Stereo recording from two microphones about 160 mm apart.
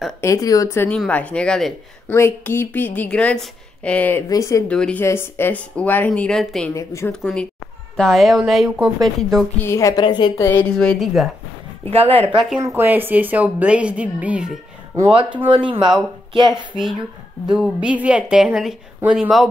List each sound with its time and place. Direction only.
0.2 s a woman's voice: 20° left (ahead or behind)
4.3 s a woman's voice: 20° left (ahead or behind)
4.6 s a woman's voice: 5° left (ahead or behind)
6.7 s a woman's voice: 20° left (ahead or behind)
7.1 s a woman's voice: 5° left (ahead or behind)
9.6 s a woman's voice: 20° left (ahead or behind)
10.4 s a woman's voice: 15° left (ahead or behind)
11.9 s speech: 35° right (ahead or behind)
12.5 s a woman's voice: 15° right (ahead or behind)
15.5 s speech: 30° right (ahead or behind)
17.5 s a woman's voice: 5° right (ahead or behind)